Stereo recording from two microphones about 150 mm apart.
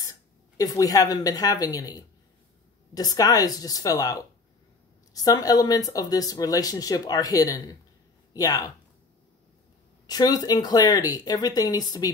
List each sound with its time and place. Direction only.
0.6 s speech: 25° left (ahead or behind)
10.0 s speech: 25° left (ahead or behind)